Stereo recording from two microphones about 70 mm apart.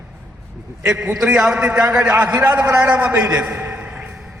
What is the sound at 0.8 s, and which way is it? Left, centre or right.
A man's voice, centre.